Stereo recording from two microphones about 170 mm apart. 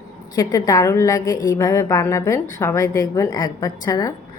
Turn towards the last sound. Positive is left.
turn(degrees=20)  # may be behind; listen again after turning